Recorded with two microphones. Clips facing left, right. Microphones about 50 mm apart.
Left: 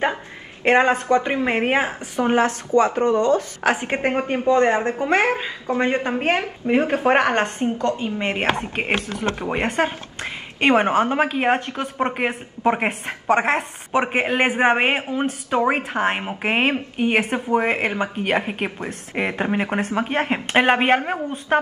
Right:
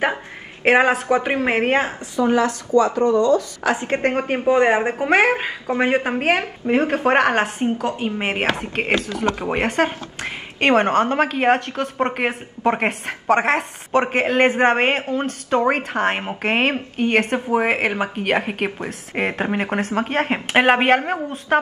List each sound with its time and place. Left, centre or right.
0.7 s a woman's voice: centre
1.7 s speech: centre
2.1 s a woman's voice: left
4.0 s speech: centre
4.3 s a woman's voice: centre
5.8 s a woman's voice: centre
6.6 s speech: centre
8.9 s speech: right
9.5 s speech: centre
17.5 s speech: centre